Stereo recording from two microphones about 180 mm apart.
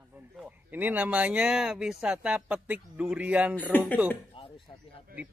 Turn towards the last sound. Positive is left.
turn(degrees=10)  # may be behind; listen again after turning